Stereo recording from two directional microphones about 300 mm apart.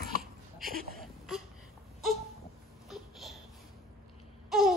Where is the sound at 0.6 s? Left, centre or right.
Right.